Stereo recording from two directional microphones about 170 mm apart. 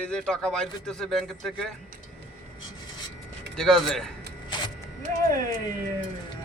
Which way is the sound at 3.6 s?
Centre (ahead or behind).